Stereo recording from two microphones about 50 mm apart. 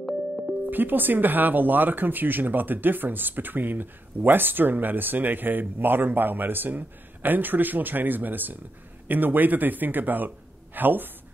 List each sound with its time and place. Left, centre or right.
0.7 s a man's voice: right